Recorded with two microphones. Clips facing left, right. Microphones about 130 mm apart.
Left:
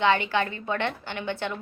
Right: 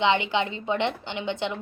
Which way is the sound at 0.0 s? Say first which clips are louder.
Even; 20° right (ahead or behind).